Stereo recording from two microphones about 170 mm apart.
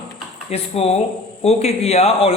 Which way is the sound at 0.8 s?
35° left (ahead or behind).